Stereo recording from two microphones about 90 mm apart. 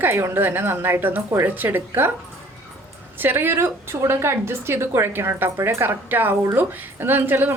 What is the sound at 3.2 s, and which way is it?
A woman's voice, 25° right (ahead or behind).